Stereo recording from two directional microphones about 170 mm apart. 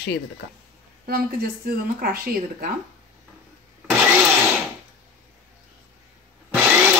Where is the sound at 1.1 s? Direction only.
60° right (ahead or behind).